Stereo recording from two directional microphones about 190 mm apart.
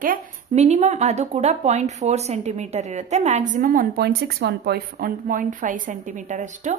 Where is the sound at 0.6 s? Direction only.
35° right (ahead or behind).